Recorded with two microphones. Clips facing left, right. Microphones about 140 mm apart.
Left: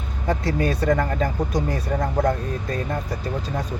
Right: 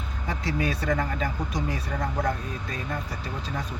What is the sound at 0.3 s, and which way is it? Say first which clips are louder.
Speech: left 6 dB; 45° left (ahead or behind).